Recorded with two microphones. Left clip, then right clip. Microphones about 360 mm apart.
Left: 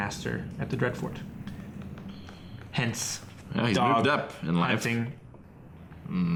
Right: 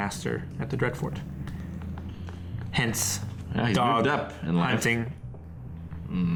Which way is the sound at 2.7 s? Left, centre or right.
Left.